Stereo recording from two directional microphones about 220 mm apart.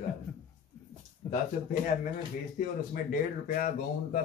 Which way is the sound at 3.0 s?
40° left (ahead or behind).